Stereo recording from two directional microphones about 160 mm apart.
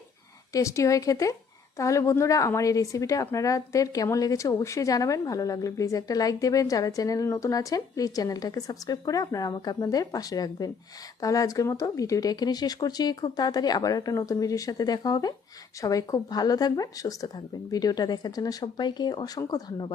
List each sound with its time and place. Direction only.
0.5 s a woman's voice: 20° left (ahead or behind)